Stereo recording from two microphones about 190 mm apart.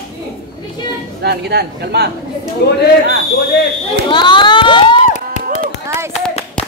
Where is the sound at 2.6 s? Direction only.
60° left (ahead or behind).